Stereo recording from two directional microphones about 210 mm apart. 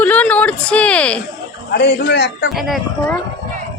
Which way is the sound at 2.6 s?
Centre (ahead or behind).